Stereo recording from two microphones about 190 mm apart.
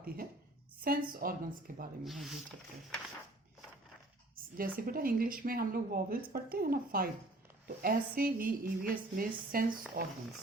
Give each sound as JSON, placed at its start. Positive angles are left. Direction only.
{"t": 0.0, "sound": "a woman's voice", "side_deg": -50}
{"t": 2.0, "sound": "speech", "side_deg": 0}
{"t": 4.5, "sound": "speech", "side_deg": -50}